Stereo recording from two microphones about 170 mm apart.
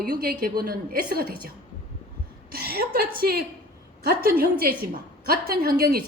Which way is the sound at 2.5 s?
65° right (ahead or behind).